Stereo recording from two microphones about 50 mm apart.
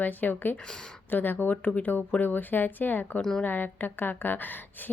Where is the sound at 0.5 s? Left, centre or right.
Centre.